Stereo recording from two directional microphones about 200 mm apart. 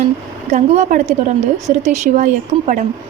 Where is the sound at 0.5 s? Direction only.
35° right (ahead or behind).